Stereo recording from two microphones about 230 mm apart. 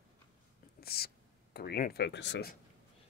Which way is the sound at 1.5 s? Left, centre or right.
Left.